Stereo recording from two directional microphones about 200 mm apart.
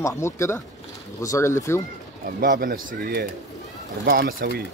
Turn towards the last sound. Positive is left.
turn(degrees=-55)  # may be behind; listen again after turning